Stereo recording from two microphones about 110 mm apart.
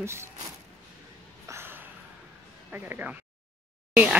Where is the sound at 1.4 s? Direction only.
25° right (ahead or behind).